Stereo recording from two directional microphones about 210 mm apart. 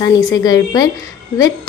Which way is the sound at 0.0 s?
15° left (ahead or behind).